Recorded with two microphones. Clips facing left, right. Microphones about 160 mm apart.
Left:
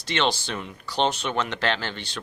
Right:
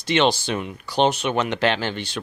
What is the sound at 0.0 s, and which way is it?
Speech, 15° right (ahead or behind).